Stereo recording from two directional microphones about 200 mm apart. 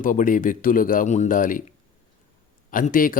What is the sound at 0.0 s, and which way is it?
Speech, 40° left (ahead or behind).